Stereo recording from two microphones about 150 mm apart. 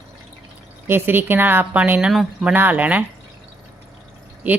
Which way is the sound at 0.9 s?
15° right (ahead or behind).